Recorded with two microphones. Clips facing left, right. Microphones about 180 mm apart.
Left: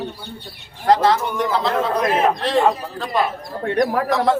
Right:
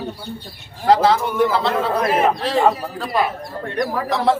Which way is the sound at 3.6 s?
60° left (ahead or behind).